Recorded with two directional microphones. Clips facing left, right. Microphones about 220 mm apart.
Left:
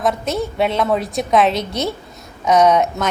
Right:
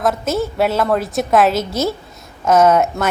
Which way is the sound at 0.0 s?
Centre (ahead or behind).